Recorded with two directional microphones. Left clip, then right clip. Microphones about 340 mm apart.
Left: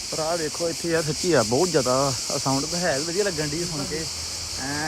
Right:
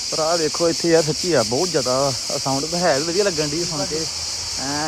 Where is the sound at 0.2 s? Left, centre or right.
Right.